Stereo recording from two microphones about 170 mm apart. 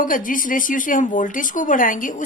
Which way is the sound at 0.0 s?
50° left (ahead or behind).